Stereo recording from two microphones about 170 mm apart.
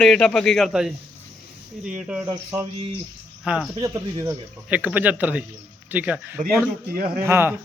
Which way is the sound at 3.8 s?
20° right (ahead or behind).